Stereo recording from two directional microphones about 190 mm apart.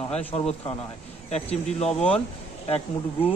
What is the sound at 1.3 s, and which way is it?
Speech, 35° left (ahead or behind).